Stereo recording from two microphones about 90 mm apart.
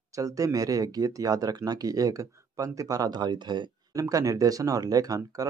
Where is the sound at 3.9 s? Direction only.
40° right (ahead or behind).